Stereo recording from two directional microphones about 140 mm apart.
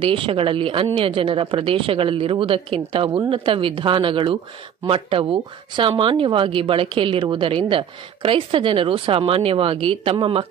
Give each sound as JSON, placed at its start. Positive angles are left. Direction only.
{"t": 0.0, "sound": "speech", "side_deg": -40}